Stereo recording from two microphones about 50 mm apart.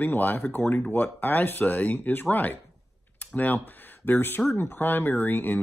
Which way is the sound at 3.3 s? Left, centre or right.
Left.